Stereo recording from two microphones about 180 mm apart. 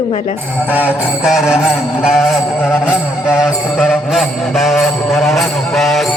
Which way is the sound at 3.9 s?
Centre (ahead or behind).